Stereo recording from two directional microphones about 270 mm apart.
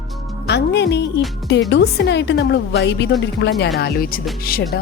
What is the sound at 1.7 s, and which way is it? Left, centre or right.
A woman's voice, left.